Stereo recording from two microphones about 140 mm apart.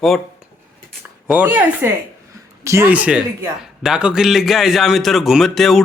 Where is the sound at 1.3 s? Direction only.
10° right (ahead or behind).